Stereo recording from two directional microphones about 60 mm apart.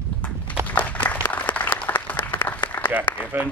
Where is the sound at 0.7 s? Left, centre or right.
Left.